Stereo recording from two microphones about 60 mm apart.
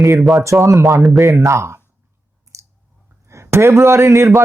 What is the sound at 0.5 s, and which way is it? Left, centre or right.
Speech, right.